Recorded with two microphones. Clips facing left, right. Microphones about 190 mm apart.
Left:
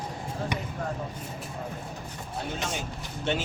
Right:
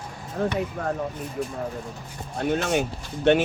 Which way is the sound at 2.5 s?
65° right (ahead or behind).